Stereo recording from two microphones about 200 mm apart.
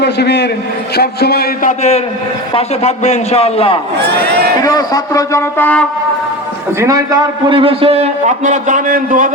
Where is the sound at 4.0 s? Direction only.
55° right (ahead or behind).